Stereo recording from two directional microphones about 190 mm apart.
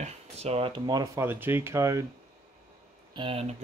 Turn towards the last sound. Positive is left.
turn(degrees=-30)  # may be behind; listen again after turning